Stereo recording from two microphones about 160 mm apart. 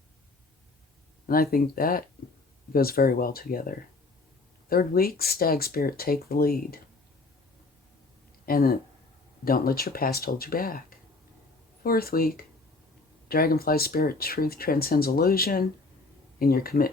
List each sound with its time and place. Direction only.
1.3 s speech: 65° left (ahead or behind)
8.4 s speech: 65° left (ahead or behind)